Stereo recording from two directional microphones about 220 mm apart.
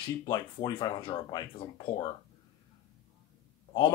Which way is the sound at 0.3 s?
20° left (ahead or behind).